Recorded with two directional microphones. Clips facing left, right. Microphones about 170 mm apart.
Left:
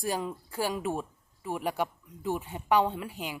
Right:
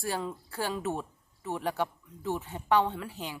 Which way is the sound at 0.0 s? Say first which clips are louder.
Left 2 dB; 15° left (ahead or behind).